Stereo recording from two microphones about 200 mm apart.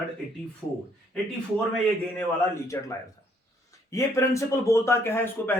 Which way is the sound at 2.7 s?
15° left (ahead or behind).